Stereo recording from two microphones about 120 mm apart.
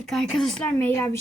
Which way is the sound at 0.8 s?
20° left (ahead or behind).